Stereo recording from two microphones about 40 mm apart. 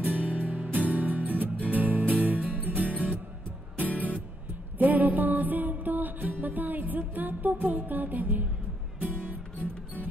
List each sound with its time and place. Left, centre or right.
0.0 s music: right
3.9 s music: left
4.7 s music: right